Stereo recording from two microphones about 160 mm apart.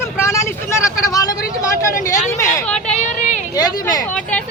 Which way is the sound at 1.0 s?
20° left (ahead or behind).